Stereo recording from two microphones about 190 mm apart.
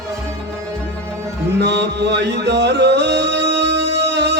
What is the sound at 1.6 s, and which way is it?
Music, 65° right (ahead or behind).